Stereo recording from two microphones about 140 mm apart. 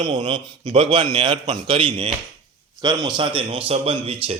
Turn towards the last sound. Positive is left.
turn(degrees=-45)  # may be behind; listen again after turning